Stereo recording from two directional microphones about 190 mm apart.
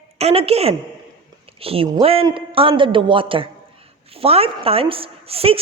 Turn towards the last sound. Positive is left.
turn(degrees=-30)  # may be behind; listen again after turning